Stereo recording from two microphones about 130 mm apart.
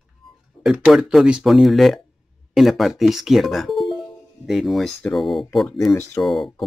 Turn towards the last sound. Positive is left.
turn(degrees=0)  # may be behind; listen again after turning